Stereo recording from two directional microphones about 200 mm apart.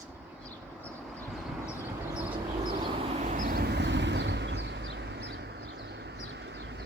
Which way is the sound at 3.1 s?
40° right (ahead or behind).